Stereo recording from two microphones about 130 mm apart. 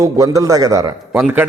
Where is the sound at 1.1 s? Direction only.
15° right (ahead or behind).